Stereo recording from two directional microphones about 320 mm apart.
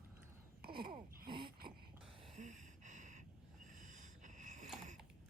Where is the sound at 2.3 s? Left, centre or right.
Right.